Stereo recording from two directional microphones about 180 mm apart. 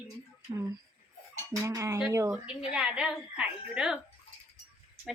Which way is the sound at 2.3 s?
5° right (ahead or behind).